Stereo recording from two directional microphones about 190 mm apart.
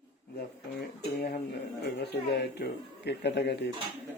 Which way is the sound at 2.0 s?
60° left (ahead or behind).